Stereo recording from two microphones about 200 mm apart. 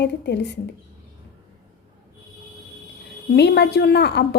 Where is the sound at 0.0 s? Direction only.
55° left (ahead or behind).